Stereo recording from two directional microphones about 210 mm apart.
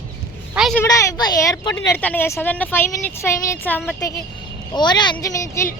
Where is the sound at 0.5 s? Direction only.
Centre (ahead or behind).